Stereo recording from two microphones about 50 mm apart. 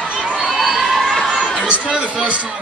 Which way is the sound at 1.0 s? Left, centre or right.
Centre.